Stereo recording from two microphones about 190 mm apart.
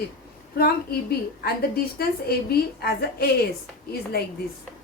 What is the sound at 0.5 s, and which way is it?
A woman's voice, 55° left (ahead or behind).